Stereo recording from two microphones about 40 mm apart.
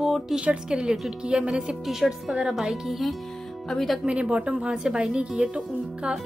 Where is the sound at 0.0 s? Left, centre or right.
Centre.